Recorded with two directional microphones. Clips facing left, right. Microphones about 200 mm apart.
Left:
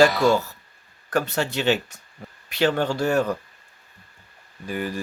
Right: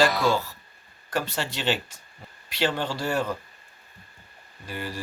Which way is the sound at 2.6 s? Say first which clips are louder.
Left 5 dB; 45° left (ahead or behind).